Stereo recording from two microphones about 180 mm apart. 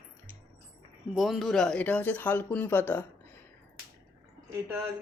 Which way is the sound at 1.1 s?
Centre (ahead or behind).